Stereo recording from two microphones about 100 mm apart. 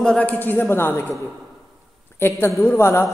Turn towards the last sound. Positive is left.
turn(degrees=25)  # may be behind; listen again after turning